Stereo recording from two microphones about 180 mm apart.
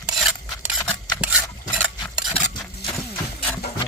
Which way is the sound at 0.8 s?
15° left (ahead or behind).